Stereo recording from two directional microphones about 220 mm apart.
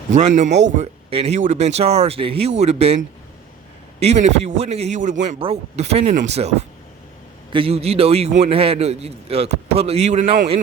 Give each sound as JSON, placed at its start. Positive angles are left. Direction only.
{"t": 0.1, "sound": "speech", "side_deg": -35}
{"t": 4.0, "sound": "speech", "side_deg": -30}